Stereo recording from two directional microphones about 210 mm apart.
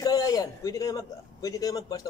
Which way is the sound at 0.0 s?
15° left (ahead or behind).